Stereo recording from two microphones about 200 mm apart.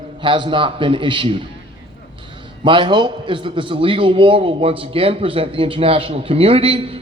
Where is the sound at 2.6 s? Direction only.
25° right (ahead or behind).